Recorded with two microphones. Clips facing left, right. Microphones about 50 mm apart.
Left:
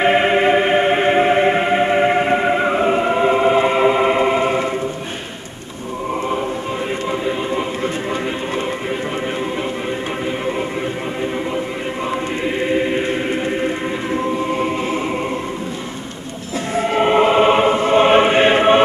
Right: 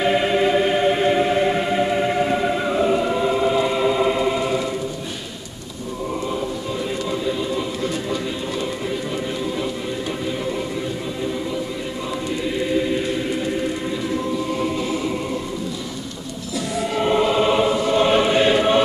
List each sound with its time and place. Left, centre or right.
0.0 s music: left
7.1 s music: left
12.5 s choir: left
16.7 s choir: left